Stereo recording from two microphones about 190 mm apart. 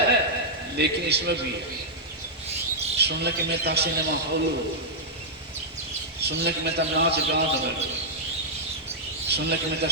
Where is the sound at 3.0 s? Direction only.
60° right (ahead or behind).